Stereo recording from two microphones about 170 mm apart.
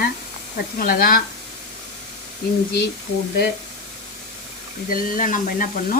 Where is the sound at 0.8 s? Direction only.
60° left (ahead or behind).